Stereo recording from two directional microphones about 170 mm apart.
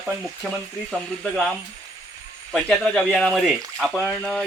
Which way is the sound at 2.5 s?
5° left (ahead or behind).